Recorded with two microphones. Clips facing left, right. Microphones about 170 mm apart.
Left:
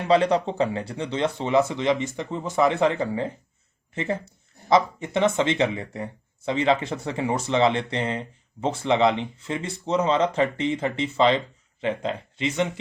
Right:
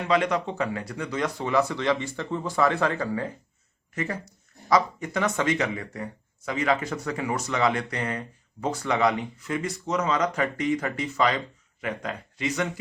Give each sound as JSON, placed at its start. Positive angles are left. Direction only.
{"t": 0.1, "sound": "speech", "side_deg": 30}